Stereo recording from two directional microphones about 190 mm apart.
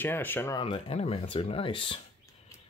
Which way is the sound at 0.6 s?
30° left (ahead or behind).